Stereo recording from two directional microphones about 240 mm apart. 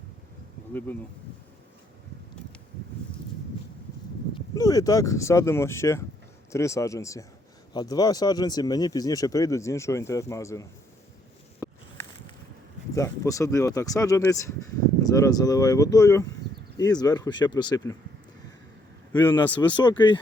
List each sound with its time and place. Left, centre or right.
0.7 s speech: centre
4.5 s speech: centre
12.9 s speech: centre
19.2 s speech: centre
19.7 s speech: centre